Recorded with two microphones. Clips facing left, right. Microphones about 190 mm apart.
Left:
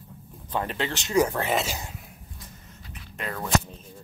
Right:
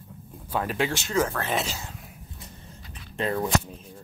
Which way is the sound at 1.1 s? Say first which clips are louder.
Left 5 dB; 15° left (ahead or behind).